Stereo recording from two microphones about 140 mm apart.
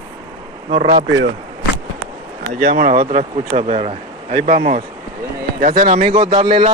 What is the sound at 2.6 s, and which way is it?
Speech, 75° right (ahead or behind).